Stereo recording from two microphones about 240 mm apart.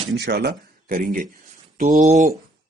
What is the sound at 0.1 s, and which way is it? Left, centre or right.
Speech, right.